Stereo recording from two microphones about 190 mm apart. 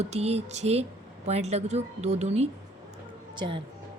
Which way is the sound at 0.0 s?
35° right (ahead or behind).